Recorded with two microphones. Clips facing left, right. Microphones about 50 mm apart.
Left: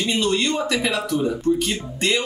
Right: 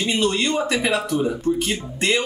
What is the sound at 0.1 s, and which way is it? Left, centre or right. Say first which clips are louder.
Speech: right 1 dB; centre.